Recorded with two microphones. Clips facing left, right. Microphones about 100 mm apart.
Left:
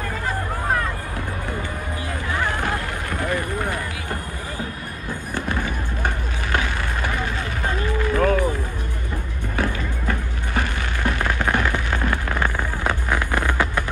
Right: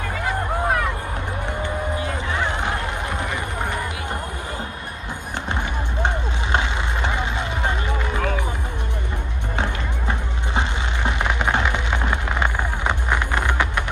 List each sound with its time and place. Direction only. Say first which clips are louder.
2.0 s a sound: right 1 dB; 20° right (ahead or behind)
5.3 s vehicle: left 1 dB; 20° right (ahead or behind)
9.6 s music: left 2 dB; 20° right (ahead or behind)